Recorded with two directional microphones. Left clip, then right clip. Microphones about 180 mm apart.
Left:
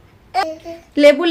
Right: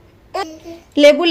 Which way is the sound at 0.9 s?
20° right (ahead or behind).